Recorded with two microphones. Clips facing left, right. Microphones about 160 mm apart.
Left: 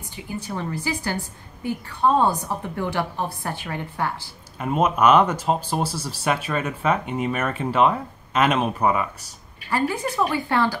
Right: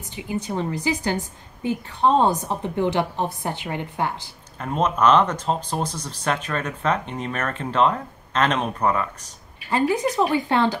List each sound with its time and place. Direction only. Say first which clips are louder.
0.1 s a woman's voice: right 4 dB; 20° right (ahead or behind)
4.6 s speech: left 1 dB; 10° left (ahead or behind)
9.7 s a woman's voice: right 3 dB; 20° right (ahead or behind)